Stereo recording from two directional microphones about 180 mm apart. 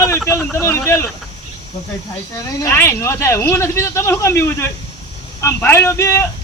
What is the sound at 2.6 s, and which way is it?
Speech, 15° left (ahead or behind).